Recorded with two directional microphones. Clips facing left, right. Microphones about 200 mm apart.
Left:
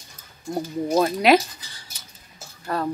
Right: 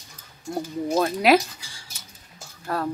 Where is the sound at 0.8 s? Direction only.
Centre (ahead or behind).